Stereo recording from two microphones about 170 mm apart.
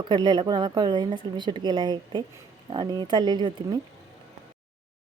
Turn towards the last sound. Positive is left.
turn(degrees=-25)  # may be behind; listen again after turning